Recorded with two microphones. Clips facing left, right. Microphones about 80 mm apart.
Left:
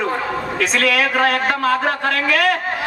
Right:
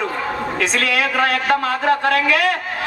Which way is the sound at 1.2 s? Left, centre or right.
Left.